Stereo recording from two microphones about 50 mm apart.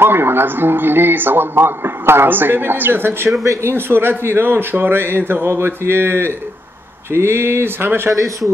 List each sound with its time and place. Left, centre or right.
0.0 s a man's voice: right